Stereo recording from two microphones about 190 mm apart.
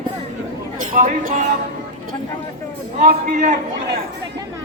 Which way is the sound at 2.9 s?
40° right (ahead or behind).